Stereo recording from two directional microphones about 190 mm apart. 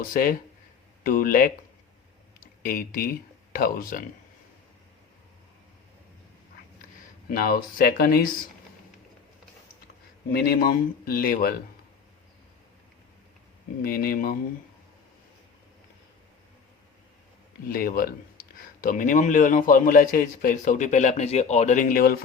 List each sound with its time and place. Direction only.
0.1 s a man's voice: 50° left (ahead or behind)
7.3 s a man's voice: 50° left (ahead or behind)
10.3 s a man's voice: 55° left (ahead or behind)
13.8 s a man's voice: 50° left (ahead or behind)
17.7 s a man's voice: 50° left (ahead or behind)